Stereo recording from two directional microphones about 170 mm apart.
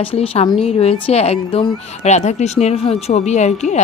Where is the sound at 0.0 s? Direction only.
35° left (ahead or behind).